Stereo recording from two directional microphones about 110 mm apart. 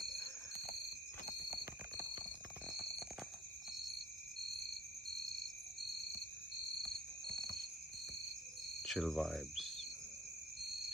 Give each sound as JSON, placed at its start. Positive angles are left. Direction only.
{"t": 1.6, "sound": "horse", "side_deg": -30}
{"t": 7.3, "sound": "a sound", "side_deg": 5}
{"t": 8.8, "sound": "speech", "side_deg": 0}